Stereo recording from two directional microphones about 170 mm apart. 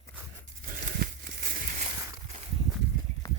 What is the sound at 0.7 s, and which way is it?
Crumpling, 65° right (ahead or behind).